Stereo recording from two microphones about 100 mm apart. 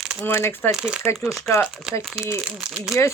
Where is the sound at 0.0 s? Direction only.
10° right (ahead or behind).